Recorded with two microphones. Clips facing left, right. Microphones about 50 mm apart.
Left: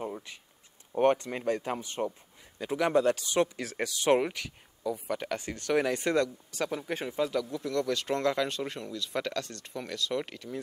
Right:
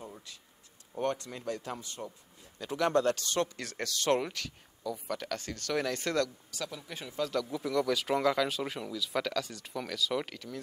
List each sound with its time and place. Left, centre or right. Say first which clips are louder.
0.1 s a sound: left 8 dB; left
1.1 s speech: left 7 dB; left
2.6 s speech: left 2 dB; centre
6.5 s speech: left 8 dB; left
7.4 s speech: even; centre